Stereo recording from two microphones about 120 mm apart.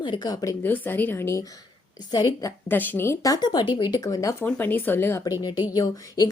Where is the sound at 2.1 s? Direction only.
30° left (ahead or behind).